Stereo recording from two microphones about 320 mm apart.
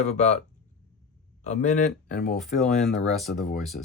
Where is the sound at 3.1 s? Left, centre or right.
Centre.